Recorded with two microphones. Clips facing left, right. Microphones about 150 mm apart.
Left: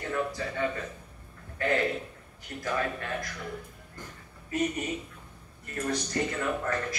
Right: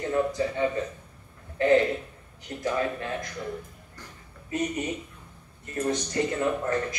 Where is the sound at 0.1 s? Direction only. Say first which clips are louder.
Right 5 dB; 25° right (ahead or behind).